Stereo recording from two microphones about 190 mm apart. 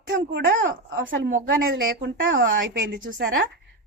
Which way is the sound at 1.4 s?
55° right (ahead or behind).